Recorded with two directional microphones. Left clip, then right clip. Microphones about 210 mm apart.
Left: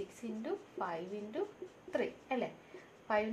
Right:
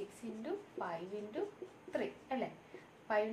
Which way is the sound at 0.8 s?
35° left (ahead or behind).